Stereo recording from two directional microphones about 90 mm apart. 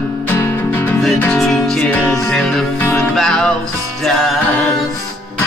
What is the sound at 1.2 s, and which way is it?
Music, 10° left (ahead or behind).